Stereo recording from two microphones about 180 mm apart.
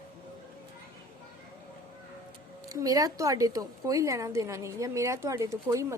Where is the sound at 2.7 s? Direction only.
20° right (ahead or behind).